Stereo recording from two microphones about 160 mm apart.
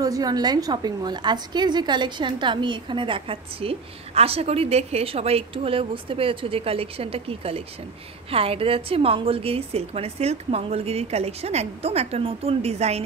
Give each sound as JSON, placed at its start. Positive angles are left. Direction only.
{"t": 0.0, "sound": "a woman's voice", "side_deg": -20}